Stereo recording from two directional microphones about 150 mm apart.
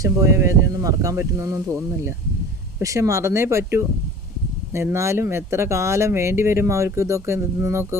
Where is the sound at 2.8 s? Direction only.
20° right (ahead or behind).